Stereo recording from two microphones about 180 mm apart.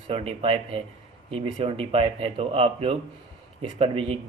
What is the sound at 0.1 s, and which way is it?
A man's voice, 30° right (ahead or behind).